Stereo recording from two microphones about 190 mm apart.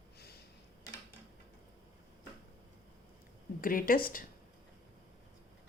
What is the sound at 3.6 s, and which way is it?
Speech, 50° left (ahead or behind).